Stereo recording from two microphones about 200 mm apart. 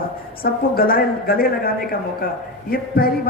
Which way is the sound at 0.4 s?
45° left (ahead or behind).